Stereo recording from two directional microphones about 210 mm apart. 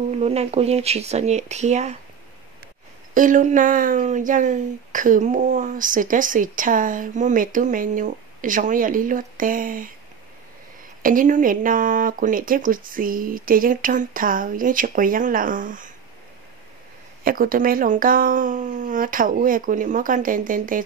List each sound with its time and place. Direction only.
0.1 s speech: 30° right (ahead or behind)
3.2 s speech: 40° right (ahead or behind)
11.0 s speech: 40° right (ahead or behind)
17.2 s speech: 45° right (ahead or behind)